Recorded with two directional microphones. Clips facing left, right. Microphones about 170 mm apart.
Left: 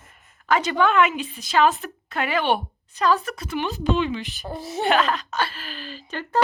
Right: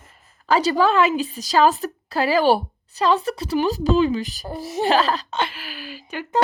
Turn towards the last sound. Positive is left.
turn(degrees=-10)  # may be behind; listen again after turning